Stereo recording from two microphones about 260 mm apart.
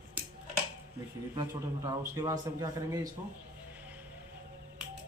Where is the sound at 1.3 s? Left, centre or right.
Centre.